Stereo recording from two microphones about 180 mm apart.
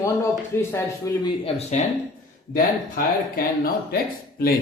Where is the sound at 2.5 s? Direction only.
55° left (ahead or behind).